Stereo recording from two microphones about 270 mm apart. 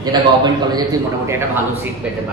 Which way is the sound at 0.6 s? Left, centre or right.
Centre.